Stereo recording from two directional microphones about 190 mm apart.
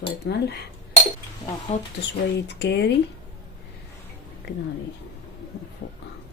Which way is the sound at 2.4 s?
65° left (ahead or behind).